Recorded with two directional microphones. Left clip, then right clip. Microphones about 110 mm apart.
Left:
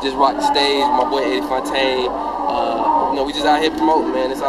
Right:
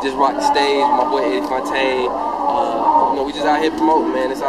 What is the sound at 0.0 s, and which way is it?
Speech, 5° right (ahead or behind).